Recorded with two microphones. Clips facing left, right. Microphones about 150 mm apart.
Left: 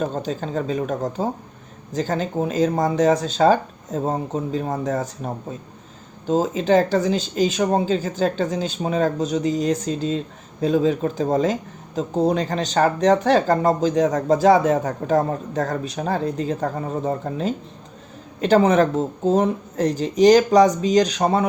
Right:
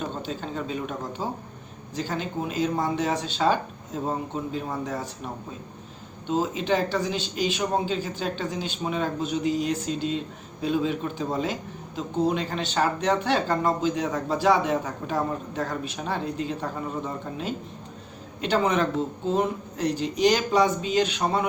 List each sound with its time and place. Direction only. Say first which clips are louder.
0.0 s speech: left 7 dB; 40° left (ahead or behind)